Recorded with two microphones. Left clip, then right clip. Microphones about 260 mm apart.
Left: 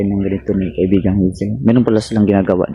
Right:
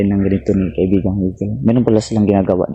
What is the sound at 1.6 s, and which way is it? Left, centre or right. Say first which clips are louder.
Speech: even; centre.